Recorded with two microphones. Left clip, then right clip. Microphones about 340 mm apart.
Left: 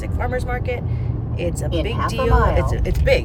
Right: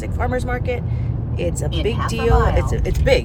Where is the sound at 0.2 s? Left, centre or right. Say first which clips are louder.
Right 2 dB; centre.